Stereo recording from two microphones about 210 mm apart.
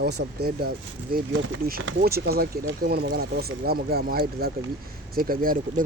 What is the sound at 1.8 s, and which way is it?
Speech, 50° right (ahead or behind).